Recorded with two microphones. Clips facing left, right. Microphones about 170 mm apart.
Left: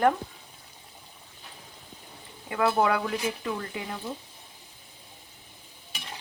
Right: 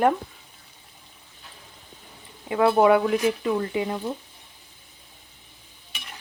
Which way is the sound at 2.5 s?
25° right (ahead or behind).